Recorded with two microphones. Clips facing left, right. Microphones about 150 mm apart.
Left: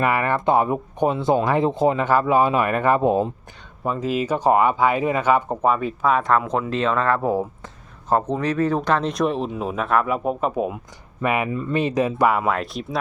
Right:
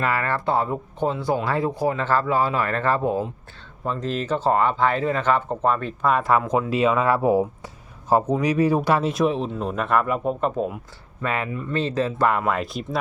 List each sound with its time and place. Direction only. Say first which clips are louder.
0.0 s speech: left 3 dB; 15° left (ahead or behind)
3.8 s speech: left 3 dB; 10° left (ahead or behind)
12.5 s speech: left 1 dB; centre (ahead or behind)